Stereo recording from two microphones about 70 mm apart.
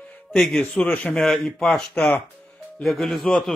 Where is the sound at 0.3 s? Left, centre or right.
Centre.